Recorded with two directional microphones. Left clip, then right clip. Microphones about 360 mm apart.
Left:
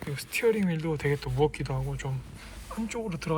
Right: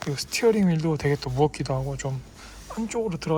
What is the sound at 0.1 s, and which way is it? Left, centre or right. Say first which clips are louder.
Speech: right 4 dB; centre.